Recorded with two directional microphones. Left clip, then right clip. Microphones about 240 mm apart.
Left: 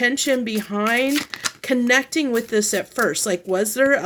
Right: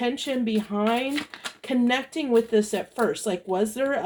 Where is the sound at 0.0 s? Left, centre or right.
Left.